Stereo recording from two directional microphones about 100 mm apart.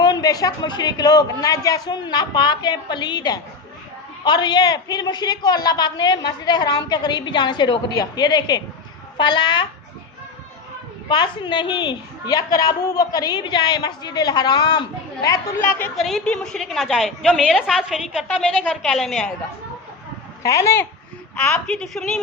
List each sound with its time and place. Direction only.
0.0 s a man's voice: 40° left (ahead or behind)
11.1 s a man's voice: 50° left (ahead or behind)
15.2 s speech: 30° left (ahead or behind)
16.0 s a woman's voice: centre (ahead or behind)
20.4 s speech: 30° left (ahead or behind)
21.3 s a woman's voice: 10° left (ahead or behind)